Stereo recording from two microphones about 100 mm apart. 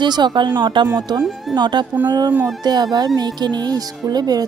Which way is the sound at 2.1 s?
45° right (ahead or behind).